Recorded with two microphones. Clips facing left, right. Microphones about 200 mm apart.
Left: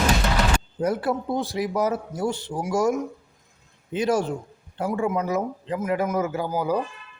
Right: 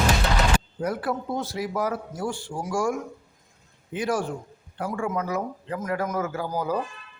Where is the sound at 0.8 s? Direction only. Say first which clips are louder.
Left 6 dB; 25° left (ahead or behind).